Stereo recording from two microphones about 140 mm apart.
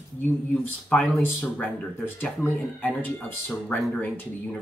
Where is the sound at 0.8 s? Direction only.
10° left (ahead or behind).